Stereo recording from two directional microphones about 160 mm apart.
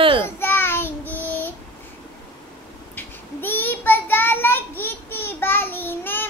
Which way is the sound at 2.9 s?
15° left (ahead or behind).